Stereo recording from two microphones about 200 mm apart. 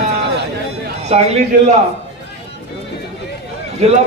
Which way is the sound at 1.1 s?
30° right (ahead or behind).